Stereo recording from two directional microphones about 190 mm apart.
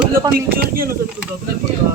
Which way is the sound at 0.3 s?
50° right (ahead or behind).